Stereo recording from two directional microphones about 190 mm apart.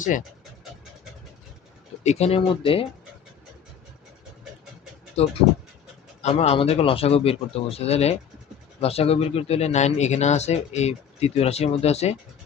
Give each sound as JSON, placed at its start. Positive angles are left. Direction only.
{"t": 2.0, "sound": "speech", "side_deg": 35}
{"t": 5.2, "sound": "speech", "side_deg": 35}